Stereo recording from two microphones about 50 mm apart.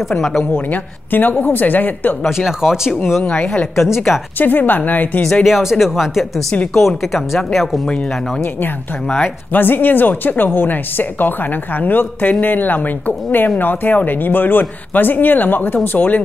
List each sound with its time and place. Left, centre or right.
0.2 s speech: centre
0.7 s speech: left
2.2 s speech: centre
3.3 s a woman's voice: left
3.9 s speech: centre
4.4 s speech: left
5.4 s speech: centre
9.2 s speech: left